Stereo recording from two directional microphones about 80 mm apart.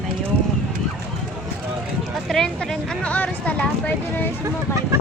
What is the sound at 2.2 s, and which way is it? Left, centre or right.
Speech, centre.